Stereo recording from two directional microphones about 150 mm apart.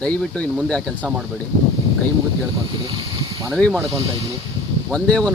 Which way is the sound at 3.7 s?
20° right (ahead or behind).